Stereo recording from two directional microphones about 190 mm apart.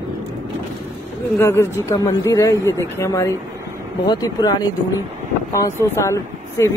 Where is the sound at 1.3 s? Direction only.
15° left (ahead or behind).